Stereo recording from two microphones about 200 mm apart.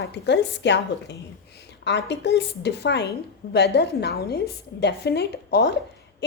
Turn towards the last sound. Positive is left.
turn(degrees=55)  # may be behind; listen again after turning